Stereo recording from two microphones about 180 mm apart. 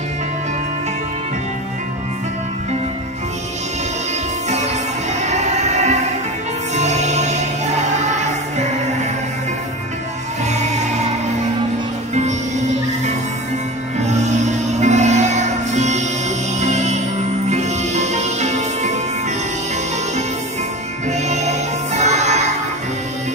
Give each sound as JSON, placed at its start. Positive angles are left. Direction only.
{"t": 5.2, "sound": "music", "side_deg": -40}
{"t": 10.5, "sound": "choir", "side_deg": -40}
{"t": 12.1, "sound": "music", "side_deg": -40}
{"t": 13.9, "sound": "music", "side_deg": -40}
{"t": 21.1, "sound": "music", "side_deg": -40}